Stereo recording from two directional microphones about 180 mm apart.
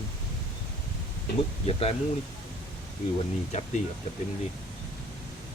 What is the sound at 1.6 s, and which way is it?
Speech, 35° left (ahead or behind).